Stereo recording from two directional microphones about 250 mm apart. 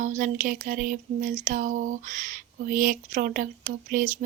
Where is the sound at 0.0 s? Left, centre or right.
Right.